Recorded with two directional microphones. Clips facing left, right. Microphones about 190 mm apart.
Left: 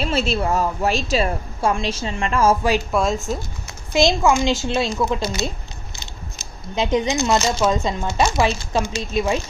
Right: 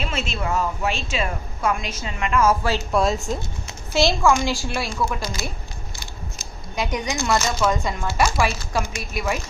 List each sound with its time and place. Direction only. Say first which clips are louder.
0.0 s a woman's voice: left 6 dB; 35° left (ahead or behind)
2.9 s speech: even; centre (ahead or behind)
3.9 s speech: left 2 dB; 20° left (ahead or behind)
6.7 s speech: left 6 dB; 25° left (ahead or behind)